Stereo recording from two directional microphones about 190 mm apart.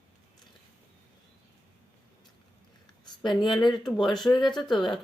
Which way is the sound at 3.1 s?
25° left (ahead or behind).